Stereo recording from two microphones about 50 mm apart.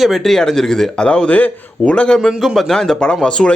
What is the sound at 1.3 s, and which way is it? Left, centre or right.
A man's voice, left.